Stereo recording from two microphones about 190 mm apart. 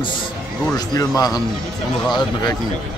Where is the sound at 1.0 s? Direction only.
20° left (ahead or behind).